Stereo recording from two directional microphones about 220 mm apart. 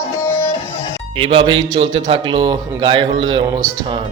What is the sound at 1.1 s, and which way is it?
A man's voice, 25° right (ahead or behind).